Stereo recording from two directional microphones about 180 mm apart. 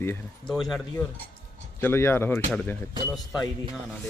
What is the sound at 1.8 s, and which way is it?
Speech, 15° left (ahead or behind).